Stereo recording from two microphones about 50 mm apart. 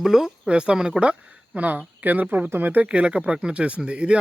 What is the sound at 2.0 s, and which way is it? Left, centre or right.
Speech, right.